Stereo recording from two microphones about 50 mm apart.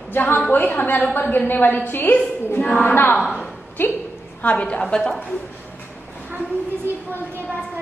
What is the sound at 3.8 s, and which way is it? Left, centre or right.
Speech, left.